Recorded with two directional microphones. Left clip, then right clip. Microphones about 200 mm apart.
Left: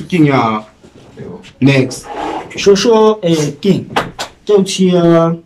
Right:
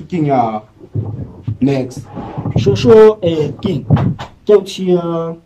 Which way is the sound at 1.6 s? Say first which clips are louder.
Left 4 dB; 35° right (ahead or behind).